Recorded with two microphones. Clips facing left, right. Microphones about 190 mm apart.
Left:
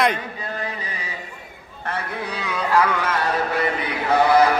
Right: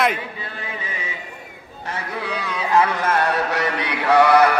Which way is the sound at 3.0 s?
65° right (ahead or behind).